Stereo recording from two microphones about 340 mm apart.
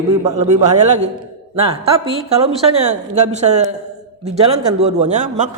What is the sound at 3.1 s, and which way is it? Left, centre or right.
Speech, centre.